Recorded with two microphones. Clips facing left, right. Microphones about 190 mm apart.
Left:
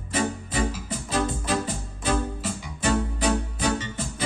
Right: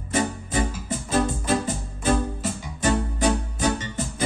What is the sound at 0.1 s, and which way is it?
Music, 45° right (ahead or behind).